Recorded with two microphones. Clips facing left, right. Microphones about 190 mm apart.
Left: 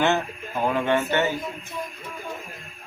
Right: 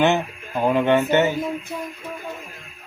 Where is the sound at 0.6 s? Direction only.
15° right (ahead or behind).